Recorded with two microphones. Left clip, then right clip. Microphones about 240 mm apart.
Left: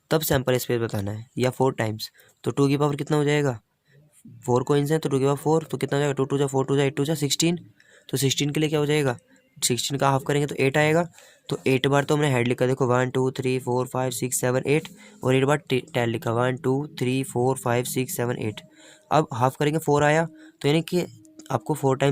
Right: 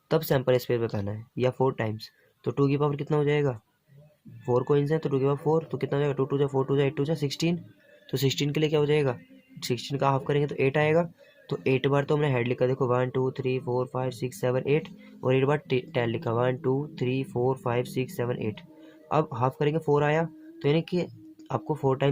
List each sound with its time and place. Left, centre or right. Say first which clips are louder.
0.1 s speech: left 1 dB; left